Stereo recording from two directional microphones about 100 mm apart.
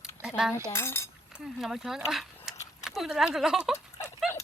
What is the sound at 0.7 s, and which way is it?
Speech, 25° left (ahead or behind).